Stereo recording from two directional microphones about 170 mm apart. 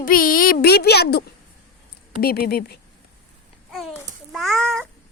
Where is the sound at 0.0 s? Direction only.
55° left (ahead or behind); by 1.2 s 70° left (ahead or behind).